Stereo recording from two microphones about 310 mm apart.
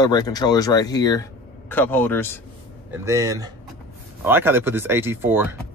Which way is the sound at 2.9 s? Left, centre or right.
Centre.